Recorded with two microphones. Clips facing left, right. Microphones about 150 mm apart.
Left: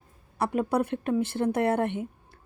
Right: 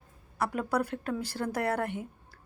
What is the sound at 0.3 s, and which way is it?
A woman's voice, 25° left (ahead or behind).